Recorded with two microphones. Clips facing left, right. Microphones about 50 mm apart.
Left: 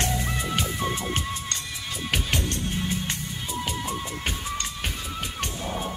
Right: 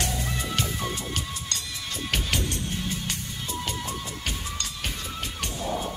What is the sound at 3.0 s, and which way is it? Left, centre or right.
Music, centre.